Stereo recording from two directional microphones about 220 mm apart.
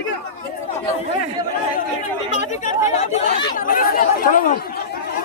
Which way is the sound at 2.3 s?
30° left (ahead or behind).